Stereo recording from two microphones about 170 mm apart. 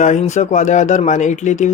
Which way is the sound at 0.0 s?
45° left (ahead or behind).